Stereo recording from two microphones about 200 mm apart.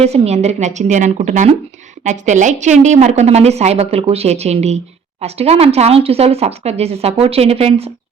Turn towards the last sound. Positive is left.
turn(degrees=-30)  # may be behind; listen again after turning